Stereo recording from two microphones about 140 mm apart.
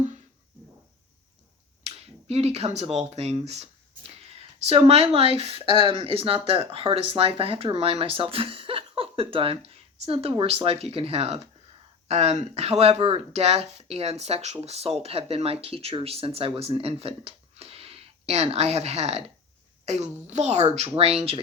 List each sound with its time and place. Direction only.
1.8 s speech: 50° right (ahead or behind)